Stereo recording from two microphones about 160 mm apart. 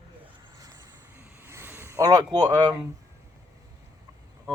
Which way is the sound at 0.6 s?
20° right (ahead or behind).